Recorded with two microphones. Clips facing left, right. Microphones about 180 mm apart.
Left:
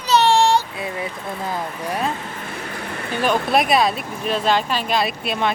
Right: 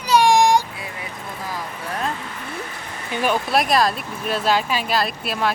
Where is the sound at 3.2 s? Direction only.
Centre (ahead or behind).